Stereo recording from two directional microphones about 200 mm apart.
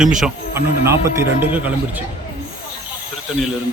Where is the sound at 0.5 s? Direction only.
15° right (ahead or behind).